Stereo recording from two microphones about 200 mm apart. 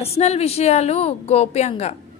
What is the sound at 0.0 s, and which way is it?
A woman's voice, 30° left (ahead or behind).